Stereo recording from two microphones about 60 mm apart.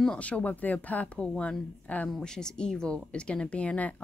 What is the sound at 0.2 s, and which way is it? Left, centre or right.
Speech, left.